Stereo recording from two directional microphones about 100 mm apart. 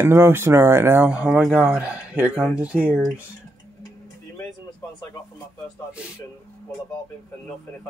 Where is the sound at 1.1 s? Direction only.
10° right (ahead or behind).